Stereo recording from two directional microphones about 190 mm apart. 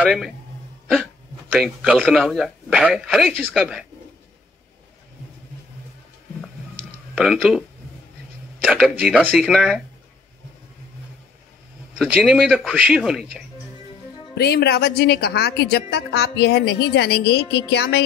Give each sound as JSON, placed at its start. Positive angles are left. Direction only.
{"t": 0.0, "sound": "speech", "side_deg": -5}
{"t": 1.5, "sound": "speech", "side_deg": 0}
{"t": 7.2, "sound": "speech", "side_deg": 0}
{"t": 8.6, "sound": "speech", "side_deg": -5}
{"t": 12.0, "sound": "speech", "side_deg": 0}
{"t": 14.3, "sound": "a woman's voice", "side_deg": 60}